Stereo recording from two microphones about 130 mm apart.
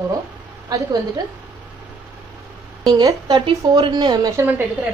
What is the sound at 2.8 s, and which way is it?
A woman's voice, 30° right (ahead or behind).